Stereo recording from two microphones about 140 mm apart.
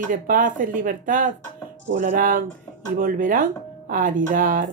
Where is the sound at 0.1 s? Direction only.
75° right (ahead or behind).